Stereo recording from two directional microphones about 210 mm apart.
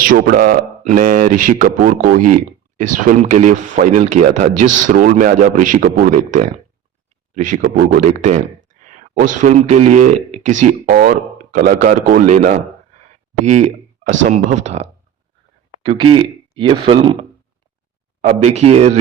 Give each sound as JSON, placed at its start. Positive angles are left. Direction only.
{"t": 0.0, "sound": "speech", "side_deg": -40}
{"t": 13.0, "sound": "a sound", "side_deg": -35}
{"t": 14.3, "sound": "speech", "side_deg": -35}